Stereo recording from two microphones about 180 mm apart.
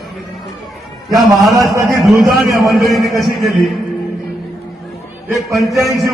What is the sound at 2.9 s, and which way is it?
Speech, centre (ahead or behind).